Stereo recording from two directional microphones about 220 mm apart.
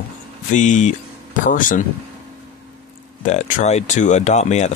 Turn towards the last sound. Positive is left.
turn(degrees=30)  # may be behind; listen again after turning